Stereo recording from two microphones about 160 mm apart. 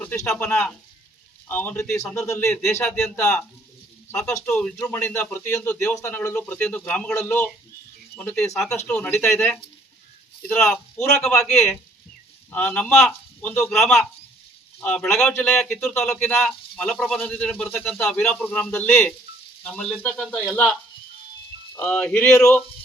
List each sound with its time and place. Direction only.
0.0 s a man's voice: 10° left (ahead or behind)
2.1 s a man's voice: 20° left (ahead or behind)
2.7 s a man's voice: 5° left (ahead or behind)
20.1 s speech: 5° right (ahead or behind)
20.4 s a man's voice: 5° left (ahead or behind)
21.8 s speech: 5° left (ahead or behind)